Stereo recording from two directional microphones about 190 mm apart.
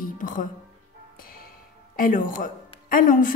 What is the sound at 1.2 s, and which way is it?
Music, 50° left (ahead or behind).